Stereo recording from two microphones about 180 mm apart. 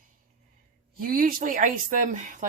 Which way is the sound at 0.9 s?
55° right (ahead or behind).